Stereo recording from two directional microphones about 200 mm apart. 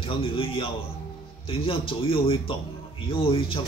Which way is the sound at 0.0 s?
25° left (ahead or behind).